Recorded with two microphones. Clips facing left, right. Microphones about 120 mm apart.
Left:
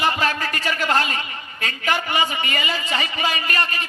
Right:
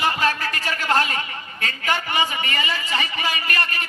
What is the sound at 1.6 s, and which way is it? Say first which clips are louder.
A man's voice: left 1 dB; 25° left (ahead or behind).